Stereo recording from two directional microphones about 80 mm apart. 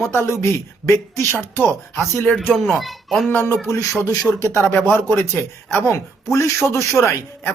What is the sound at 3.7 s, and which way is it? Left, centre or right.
Speech, left.